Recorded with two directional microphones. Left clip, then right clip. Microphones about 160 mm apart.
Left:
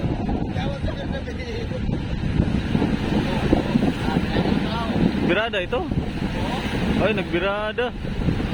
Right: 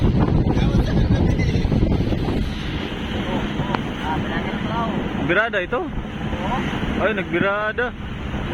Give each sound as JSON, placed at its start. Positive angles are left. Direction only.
{"t": 5.3, "sound": "speech", "side_deg": 20}
{"t": 7.0, "sound": "speech", "side_deg": 20}